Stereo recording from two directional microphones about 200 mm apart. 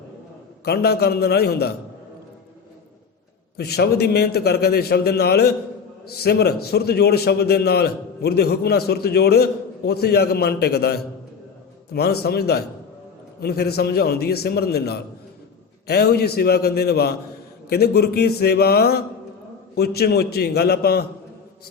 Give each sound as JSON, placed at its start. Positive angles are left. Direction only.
{"t": 0.6, "sound": "a man's voice", "side_deg": 55}
{"t": 3.6, "sound": "a man's voice", "side_deg": 55}